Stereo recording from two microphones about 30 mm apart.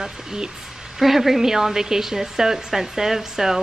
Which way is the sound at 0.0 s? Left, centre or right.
Right.